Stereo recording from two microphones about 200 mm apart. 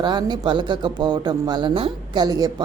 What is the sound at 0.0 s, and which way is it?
A woman's voice, 20° right (ahead or behind).